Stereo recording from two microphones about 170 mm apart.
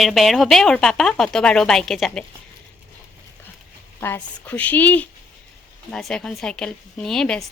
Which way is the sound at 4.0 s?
10° left (ahead or behind).